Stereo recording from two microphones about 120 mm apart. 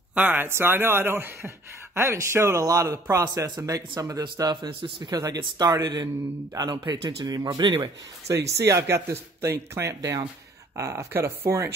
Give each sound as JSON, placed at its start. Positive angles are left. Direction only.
{"t": 0.1, "sound": "a man's voice", "side_deg": -10}
{"t": 8.5, "sound": "speech", "side_deg": -25}